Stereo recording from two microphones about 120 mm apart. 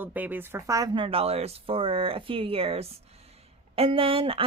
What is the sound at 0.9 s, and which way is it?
Speech, 50° right (ahead or behind).